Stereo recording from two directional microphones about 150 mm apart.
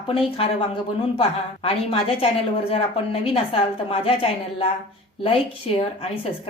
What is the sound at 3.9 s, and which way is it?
A woman's voice, 40° left (ahead or behind).